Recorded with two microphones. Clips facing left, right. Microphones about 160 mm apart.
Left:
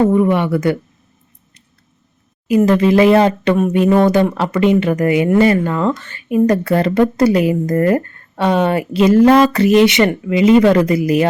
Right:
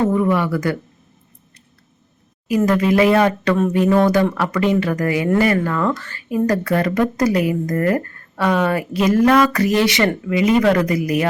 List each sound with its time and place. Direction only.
0.1 s speech: 20° left (ahead or behind)
2.6 s speech: 25° left (ahead or behind)